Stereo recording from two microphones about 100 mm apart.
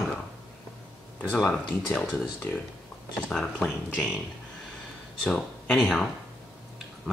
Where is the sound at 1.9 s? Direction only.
15° left (ahead or behind).